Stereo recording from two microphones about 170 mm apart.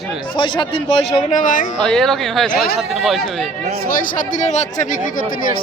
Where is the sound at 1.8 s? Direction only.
5° left (ahead or behind).